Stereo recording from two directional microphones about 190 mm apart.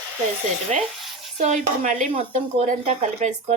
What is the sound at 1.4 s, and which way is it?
Speech, 35° right (ahead or behind).